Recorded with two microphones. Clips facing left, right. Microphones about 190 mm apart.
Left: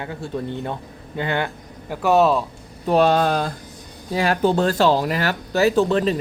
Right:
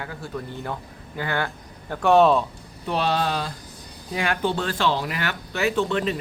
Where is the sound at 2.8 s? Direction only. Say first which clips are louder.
Left 7 dB; 45° left (ahead or behind).